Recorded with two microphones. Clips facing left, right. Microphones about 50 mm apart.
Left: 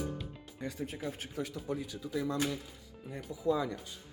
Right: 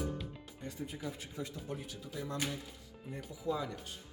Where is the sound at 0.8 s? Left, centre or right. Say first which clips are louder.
Left 1 dB; left.